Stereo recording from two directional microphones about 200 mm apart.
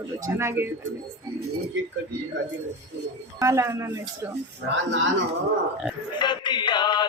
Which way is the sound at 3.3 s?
15° right (ahead or behind).